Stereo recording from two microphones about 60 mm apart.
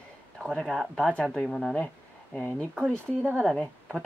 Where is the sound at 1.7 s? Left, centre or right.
Left.